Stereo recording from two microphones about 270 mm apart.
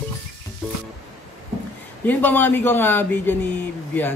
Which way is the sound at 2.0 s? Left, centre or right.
Centre.